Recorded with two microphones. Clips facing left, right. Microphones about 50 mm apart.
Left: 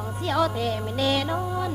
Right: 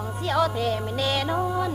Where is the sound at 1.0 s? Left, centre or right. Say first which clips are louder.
Left 2 dB; centre.